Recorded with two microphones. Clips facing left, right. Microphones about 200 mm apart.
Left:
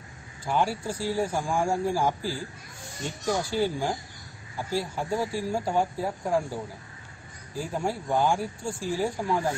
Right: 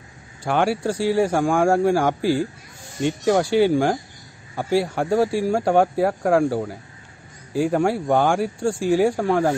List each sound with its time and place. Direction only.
0.4 s speech: 75° right (ahead or behind)